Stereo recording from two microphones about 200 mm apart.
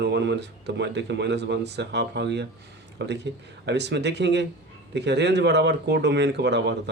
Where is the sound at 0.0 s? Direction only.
60° right (ahead or behind).